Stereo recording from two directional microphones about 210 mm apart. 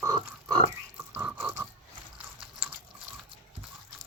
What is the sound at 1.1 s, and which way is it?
Toothbrush, 10° right (ahead or behind).